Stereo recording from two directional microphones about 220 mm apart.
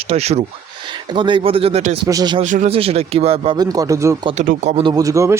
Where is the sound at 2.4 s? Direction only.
35° right (ahead or behind); by 4.3 s 15° right (ahead or behind).